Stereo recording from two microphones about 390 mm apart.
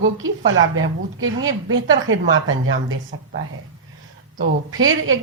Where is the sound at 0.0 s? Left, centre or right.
Right.